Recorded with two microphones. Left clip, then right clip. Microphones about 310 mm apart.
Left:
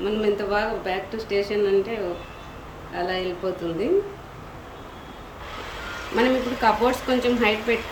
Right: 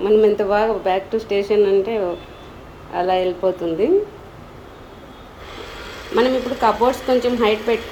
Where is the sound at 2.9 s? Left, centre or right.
Centre.